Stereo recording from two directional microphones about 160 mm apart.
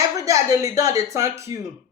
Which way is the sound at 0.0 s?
20° right (ahead or behind).